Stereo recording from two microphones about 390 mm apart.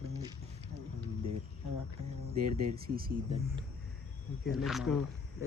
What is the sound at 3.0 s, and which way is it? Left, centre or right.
Speech, centre.